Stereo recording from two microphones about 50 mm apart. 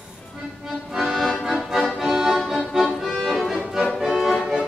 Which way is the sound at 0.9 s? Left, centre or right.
Centre.